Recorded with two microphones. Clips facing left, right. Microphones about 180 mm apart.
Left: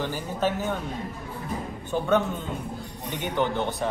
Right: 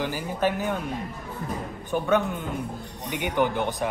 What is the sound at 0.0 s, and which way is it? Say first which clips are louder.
Speech: right 1 dB; 10° right (ahead or behind).